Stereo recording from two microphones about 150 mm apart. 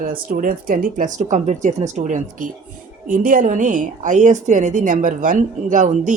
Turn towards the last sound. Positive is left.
turn(degrees=-60)  # may be behind; listen again after turning